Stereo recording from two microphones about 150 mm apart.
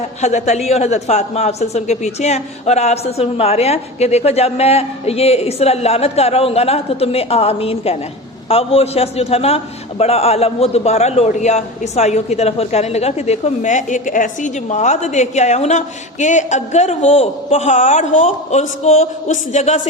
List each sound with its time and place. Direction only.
0.2 s a man's voice: 50° left (ahead or behind)